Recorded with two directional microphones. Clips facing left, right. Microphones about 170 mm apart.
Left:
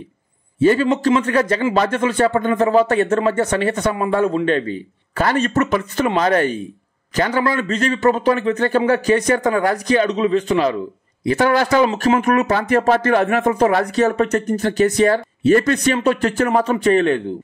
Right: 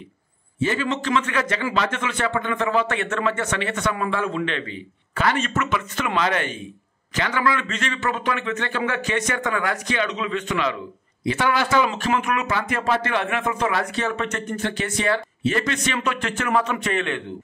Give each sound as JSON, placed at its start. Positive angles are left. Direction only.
{"t": 0.6, "sound": "speech", "side_deg": 40}